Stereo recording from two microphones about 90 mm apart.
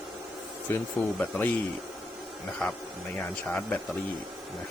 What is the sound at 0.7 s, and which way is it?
Speech, 25° left (ahead or behind).